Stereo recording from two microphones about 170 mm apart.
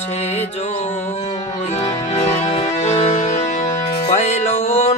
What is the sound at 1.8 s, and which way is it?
Music, 40° left (ahead or behind).